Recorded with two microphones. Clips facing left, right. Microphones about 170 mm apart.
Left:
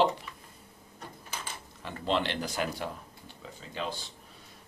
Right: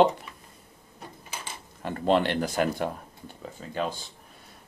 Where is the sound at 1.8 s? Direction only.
50° right (ahead or behind).